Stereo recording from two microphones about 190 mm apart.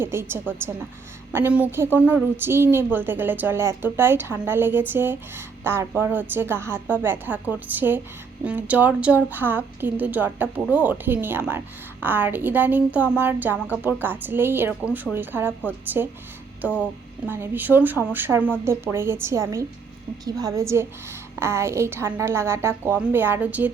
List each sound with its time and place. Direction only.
0.0 s a woman's voice: 10° right (ahead or behind)